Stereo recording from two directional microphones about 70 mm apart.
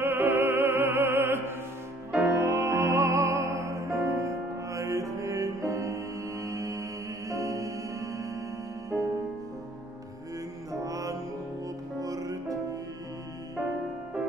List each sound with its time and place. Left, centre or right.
0.0 s opera: right
2.2 s music: right
8.9 s music: centre
10.7 s mantra: right
12.0 s music: right